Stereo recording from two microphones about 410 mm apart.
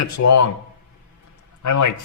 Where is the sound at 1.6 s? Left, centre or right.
Left.